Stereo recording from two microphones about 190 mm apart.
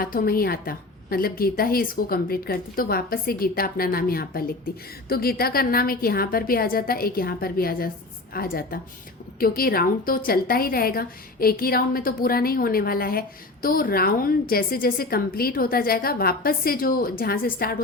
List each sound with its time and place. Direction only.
0.0 s a woman's voice: 50° left (ahead or behind)